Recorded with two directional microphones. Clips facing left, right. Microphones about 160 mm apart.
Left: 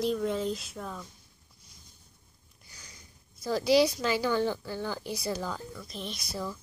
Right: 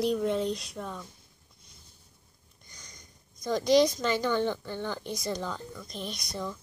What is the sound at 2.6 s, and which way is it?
Speech, 5° left (ahead or behind).